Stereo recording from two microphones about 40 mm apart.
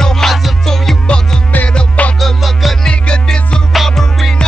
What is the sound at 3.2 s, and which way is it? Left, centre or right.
Music, left.